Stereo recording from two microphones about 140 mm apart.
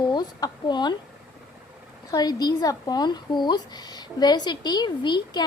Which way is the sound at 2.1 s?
30° left (ahead or behind).